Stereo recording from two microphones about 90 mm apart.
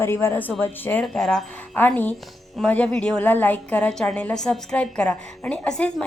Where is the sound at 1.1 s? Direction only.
5° left (ahead or behind).